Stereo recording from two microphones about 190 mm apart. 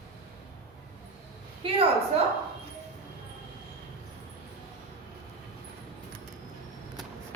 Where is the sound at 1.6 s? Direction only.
30° right (ahead or behind).